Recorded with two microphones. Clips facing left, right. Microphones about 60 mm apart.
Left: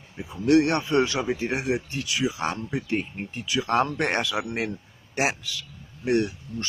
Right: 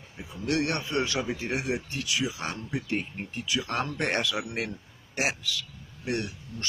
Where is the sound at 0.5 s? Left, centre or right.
Left.